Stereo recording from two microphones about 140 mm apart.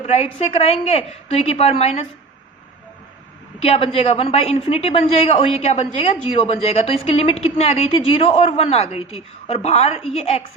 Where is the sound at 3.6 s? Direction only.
40° left (ahead or behind).